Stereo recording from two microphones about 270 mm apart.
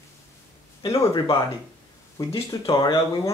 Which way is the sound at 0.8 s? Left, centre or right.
Centre.